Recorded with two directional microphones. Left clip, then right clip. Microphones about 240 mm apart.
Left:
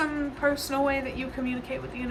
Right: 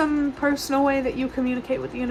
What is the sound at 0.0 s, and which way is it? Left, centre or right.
Speech, right.